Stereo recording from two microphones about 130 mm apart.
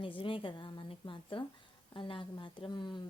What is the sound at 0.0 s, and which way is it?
A woman's voice, 40° left (ahead or behind).